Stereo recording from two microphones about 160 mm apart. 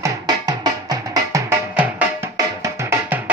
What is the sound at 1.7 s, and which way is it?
Music, 10° right (ahead or behind).